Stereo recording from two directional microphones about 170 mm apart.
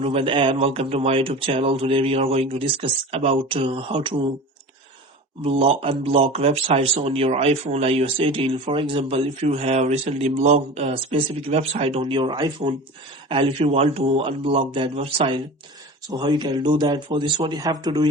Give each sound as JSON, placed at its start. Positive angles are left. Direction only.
{"t": 0.0, "sound": "speech", "side_deg": -35}
{"t": 5.4, "sound": "a man's voice", "side_deg": -35}